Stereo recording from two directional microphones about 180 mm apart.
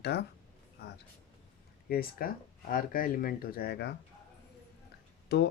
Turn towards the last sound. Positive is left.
turn(degrees=65)  # may be behind; listen again after turning